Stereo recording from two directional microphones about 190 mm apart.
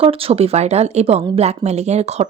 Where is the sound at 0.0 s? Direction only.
30° right (ahead or behind).